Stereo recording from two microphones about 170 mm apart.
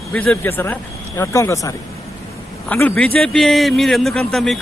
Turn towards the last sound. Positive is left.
turn(degrees=0)  # may be behind; listen again after turning